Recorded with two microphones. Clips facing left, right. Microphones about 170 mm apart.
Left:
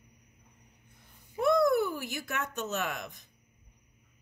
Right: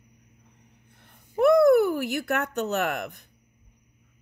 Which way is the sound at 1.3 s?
65° right (ahead or behind).